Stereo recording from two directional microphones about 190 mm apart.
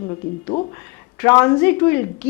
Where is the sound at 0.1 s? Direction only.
25° left (ahead or behind).